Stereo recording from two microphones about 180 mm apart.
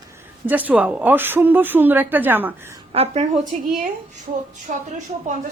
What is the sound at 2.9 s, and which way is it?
Speech, 35° right (ahead or behind).